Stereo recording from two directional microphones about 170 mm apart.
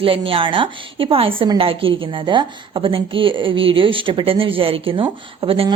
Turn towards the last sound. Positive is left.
turn(degrees=-35)  # may be behind; listen again after turning